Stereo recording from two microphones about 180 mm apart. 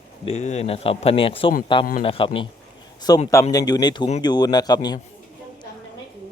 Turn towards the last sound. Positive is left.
turn(degrees=25)  # may be behind; listen again after turning